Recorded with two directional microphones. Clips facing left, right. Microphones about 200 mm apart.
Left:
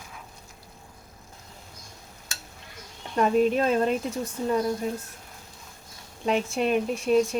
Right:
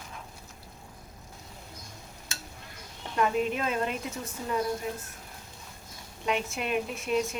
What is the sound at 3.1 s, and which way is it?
Speech, 35° left (ahead or behind).